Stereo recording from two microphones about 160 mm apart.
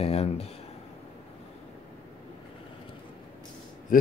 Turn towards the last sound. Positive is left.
turn(degrees=60)  # may be behind; listen again after turning